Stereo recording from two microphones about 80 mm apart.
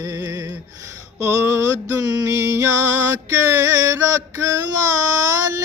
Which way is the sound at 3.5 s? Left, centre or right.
Right.